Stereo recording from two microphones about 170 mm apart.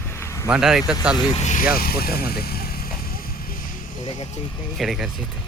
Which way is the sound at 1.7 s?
65° left (ahead or behind).